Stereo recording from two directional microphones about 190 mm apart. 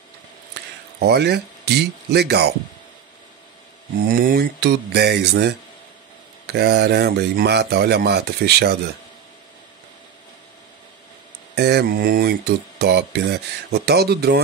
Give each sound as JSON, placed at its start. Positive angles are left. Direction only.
{"t": 0.9, "sound": "speech", "side_deg": -60}
{"t": 4.1, "sound": "speech", "side_deg": -50}
{"t": 11.5, "sound": "speech", "side_deg": -60}